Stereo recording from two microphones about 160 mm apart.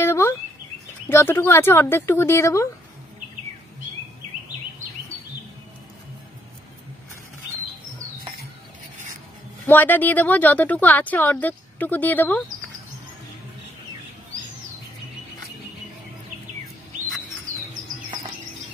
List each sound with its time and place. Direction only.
0.0 s bird: 15° left (ahead or behind)
1.0 s speech: 15° left (ahead or behind)
9.7 s speech: 10° left (ahead or behind)